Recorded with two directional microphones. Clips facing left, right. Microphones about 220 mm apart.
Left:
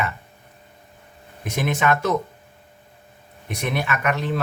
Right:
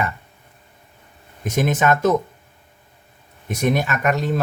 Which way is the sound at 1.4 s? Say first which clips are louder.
Right 3 dB; 40° right (ahead or behind).